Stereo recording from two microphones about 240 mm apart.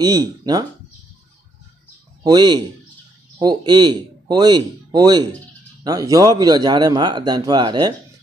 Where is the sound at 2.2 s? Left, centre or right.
Centre.